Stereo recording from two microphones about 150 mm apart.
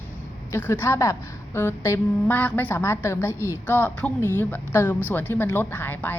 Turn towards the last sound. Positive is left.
turn(degrees=15)  # may be behind; listen again after turning